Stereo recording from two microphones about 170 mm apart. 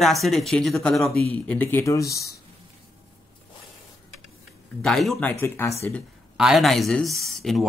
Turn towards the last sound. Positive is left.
turn(degrees=0)  # may be behind; listen again after turning